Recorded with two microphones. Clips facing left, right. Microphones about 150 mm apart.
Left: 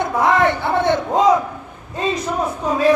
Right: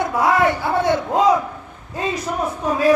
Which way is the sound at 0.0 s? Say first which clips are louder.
Left 1 dB; 10° right (ahead or behind).